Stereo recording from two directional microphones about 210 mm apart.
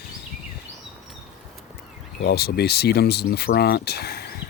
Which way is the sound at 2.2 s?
50° left (ahead or behind).